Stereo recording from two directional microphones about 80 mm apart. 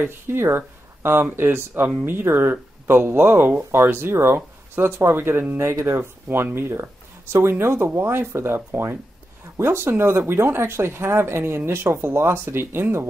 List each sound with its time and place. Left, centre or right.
0.0 s speech: right
5.6 s speech: right